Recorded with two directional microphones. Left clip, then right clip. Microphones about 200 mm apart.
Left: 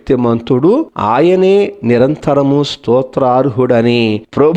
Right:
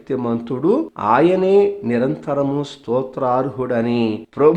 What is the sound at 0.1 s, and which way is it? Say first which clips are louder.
Speech: left 10 dB; 35° left (ahead or behind).